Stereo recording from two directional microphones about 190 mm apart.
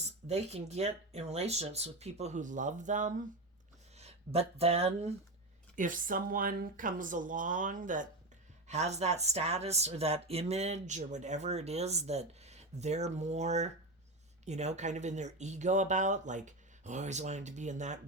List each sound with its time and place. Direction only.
0.0 s speech: 35° right (ahead or behind)
5.7 s speech: 45° right (ahead or behind)